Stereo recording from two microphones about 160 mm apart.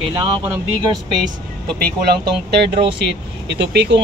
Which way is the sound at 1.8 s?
80° right.